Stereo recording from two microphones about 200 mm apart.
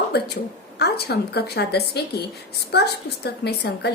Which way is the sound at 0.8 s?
55° left (ahead or behind).